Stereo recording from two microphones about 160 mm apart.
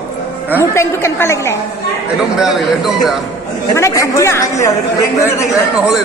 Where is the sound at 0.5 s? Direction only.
15° left (ahead or behind).